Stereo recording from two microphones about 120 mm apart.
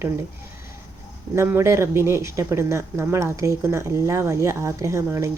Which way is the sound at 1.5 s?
20° right (ahead or behind).